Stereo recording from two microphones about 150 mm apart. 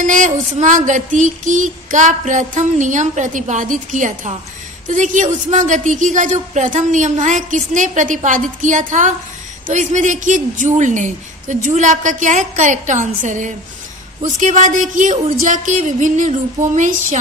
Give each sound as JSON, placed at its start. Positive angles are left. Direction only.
{"t": 0.0, "sound": "music", "side_deg": -55}